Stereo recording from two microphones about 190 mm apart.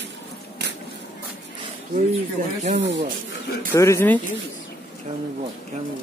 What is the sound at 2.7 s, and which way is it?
Speech, 65° right (ahead or behind).